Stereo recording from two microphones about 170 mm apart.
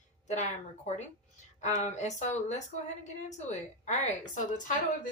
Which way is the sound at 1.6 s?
45° left (ahead or behind).